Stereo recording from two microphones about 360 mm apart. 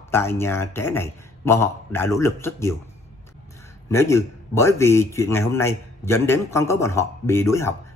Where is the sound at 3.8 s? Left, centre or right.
Centre.